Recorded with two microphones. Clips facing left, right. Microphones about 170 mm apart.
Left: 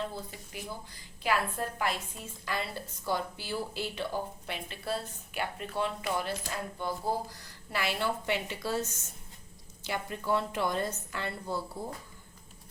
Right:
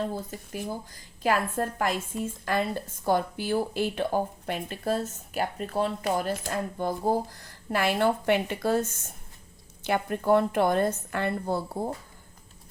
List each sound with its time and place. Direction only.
0.1 s a woman's voice: 45° right (ahead or behind)